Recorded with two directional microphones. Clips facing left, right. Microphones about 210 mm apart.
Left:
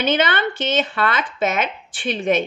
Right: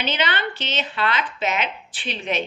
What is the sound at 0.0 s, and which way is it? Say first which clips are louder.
A woman's voice: left 6 dB; 50° left (ahead or behind).